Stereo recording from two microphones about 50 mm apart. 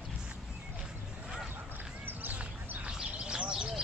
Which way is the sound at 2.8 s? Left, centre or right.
Centre.